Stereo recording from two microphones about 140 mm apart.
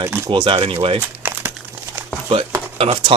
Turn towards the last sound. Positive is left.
turn(degrees=-45)  # may be behind; listen again after turning